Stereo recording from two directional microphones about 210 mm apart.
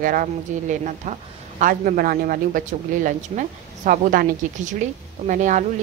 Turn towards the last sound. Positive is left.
turn(degrees=-35)  # may be behind; listen again after turning